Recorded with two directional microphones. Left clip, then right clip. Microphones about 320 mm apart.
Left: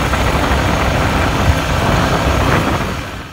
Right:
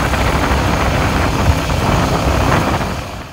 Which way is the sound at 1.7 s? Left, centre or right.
Centre.